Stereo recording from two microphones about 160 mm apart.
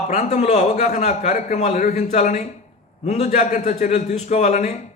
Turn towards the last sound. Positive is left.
turn(degrees=45)  # may be behind; listen again after turning